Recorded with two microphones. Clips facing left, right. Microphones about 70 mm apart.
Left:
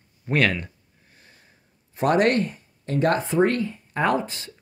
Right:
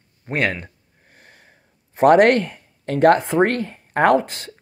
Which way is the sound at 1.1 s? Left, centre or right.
Right.